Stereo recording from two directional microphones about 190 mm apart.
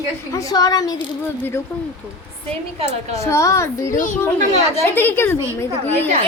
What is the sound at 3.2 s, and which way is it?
Speech, 15° left (ahead or behind).